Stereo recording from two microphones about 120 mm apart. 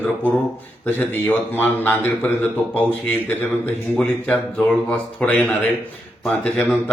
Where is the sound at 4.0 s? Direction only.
10° left (ahead or behind).